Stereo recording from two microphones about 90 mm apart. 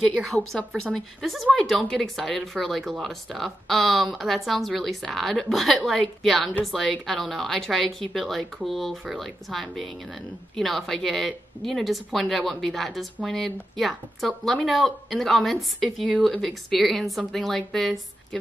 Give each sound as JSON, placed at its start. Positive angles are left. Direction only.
{"t": 0.2, "sound": "a woman's voice", "side_deg": 5}